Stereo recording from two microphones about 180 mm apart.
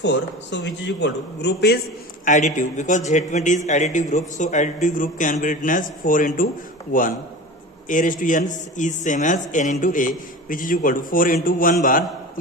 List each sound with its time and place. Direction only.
0.0 s a man's voice: 80° left; by 1.8 s 65° left (ahead or behind)
2.2 s a man's voice: 45° left (ahead or behind)